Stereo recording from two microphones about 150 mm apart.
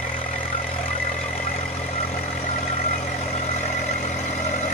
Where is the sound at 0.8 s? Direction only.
45° left (ahead or behind).